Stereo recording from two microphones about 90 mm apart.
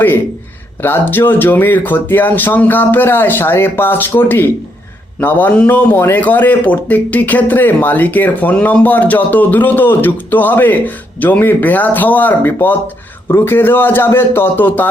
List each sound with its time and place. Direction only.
0.8 s a man's voice: 25° left (ahead or behind)